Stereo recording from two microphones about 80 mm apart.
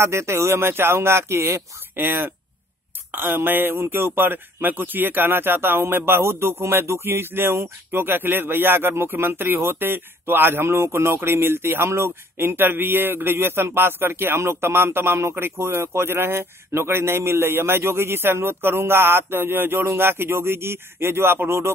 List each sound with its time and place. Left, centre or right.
0.0 s speech: right